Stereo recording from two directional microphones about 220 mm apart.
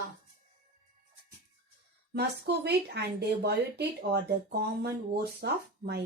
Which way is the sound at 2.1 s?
50° right (ahead or behind).